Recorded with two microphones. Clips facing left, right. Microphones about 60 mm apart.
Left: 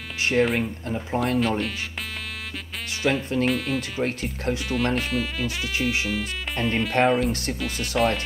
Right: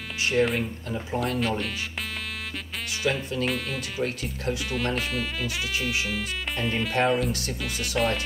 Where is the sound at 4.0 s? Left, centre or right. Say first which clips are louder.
Left 3 dB; left.